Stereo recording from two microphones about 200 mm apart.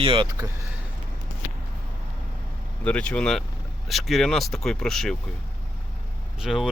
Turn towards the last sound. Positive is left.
turn(degrees=0)  # may be behind; listen again after turning